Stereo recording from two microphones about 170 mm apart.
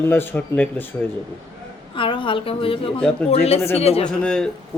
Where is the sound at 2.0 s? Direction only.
30° left (ahead or behind).